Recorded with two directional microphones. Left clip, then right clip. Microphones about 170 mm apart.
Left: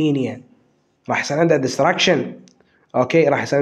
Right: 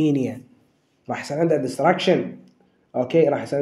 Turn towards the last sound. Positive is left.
turn(degrees=30)  # may be behind; listen again after turning